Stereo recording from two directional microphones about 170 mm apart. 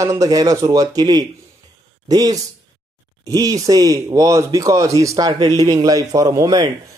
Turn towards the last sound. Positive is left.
turn(degrees=-20)  # may be behind; listen again after turning